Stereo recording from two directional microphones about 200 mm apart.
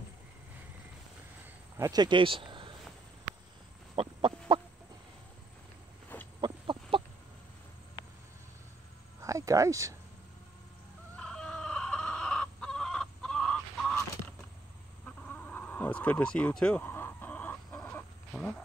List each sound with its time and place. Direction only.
1.8 s speech: 20° right (ahead or behind)
3.9 s chicken: 25° right (ahead or behind)
6.4 s chicken: 25° right (ahead or behind)
9.2 s a sound: 15° right (ahead or behind)
11.1 s chicken: 5° left (ahead or behind)
15.2 s wild animals: 10° left (ahead or behind)